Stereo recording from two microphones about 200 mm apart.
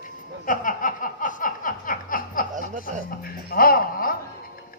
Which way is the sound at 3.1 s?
45° left (ahead or behind).